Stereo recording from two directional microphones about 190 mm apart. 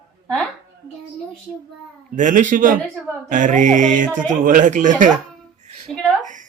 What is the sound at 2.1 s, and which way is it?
Speech, 40° right (ahead or behind).